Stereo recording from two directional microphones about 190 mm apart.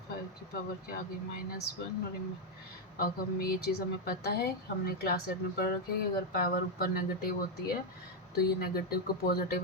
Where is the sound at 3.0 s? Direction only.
50° left (ahead or behind).